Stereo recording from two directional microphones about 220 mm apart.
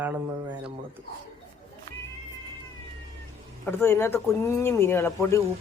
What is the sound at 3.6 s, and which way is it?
Speech, 10° left (ahead or behind).